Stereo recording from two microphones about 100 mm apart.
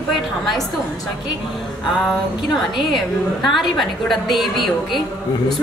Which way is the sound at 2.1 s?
Centre (ahead or behind).